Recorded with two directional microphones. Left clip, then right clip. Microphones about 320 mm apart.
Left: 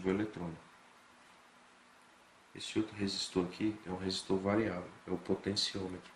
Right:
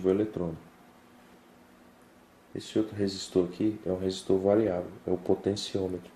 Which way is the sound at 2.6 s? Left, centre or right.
Centre.